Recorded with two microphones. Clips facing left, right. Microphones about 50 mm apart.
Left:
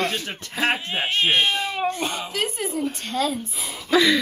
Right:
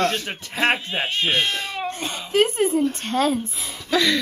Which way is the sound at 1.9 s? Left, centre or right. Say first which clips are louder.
Left 3 dB; left.